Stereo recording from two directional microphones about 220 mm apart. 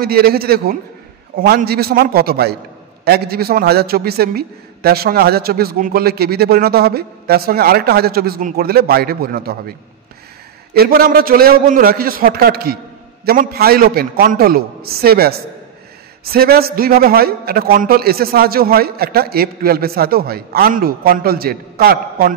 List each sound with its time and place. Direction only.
0.0 s a man's voice: 45° right (ahead or behind)